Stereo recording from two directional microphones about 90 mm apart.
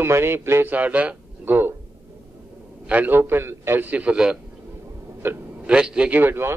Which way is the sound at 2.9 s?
20° right (ahead or behind).